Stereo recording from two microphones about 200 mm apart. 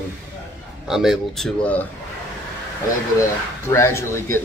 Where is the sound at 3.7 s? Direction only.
15° left (ahead or behind).